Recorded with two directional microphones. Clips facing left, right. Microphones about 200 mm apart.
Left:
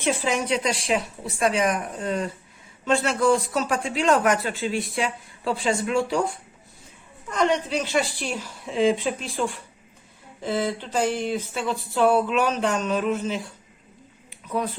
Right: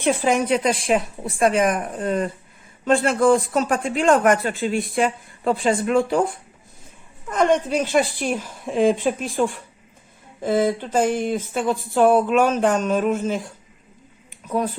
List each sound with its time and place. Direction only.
0.0 s a man's voice: 55° right (ahead or behind)
10.4 s a man's voice: 50° right (ahead or behind)
14.3 s a sound: 45° right (ahead or behind)